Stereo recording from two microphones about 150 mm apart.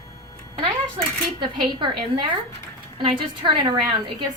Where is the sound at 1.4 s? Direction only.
30° right (ahead or behind).